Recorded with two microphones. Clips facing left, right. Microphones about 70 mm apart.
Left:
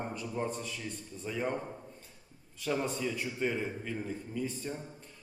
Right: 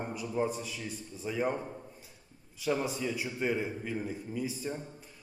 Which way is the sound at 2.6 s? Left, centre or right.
Centre.